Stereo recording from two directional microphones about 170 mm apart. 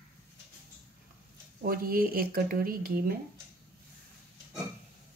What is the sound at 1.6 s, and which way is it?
Speech, 60° right (ahead or behind).